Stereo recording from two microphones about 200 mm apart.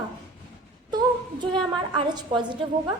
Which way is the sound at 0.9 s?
20° right (ahead or behind).